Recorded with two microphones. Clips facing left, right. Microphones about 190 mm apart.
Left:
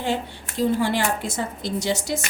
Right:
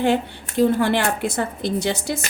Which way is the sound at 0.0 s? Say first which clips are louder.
Right 6 dB; 60° right (ahead or behind).